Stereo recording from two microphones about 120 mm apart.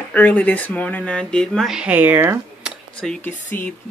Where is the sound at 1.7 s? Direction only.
10° right (ahead or behind).